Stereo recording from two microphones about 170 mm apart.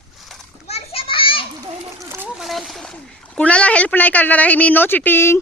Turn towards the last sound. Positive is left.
turn(degrees=15)  # may be behind; listen again after turning